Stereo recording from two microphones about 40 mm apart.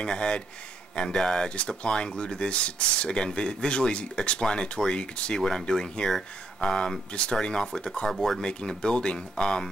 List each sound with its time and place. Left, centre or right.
0.0 s speech: left
8.1 s speech: centre
8.4 s speech: centre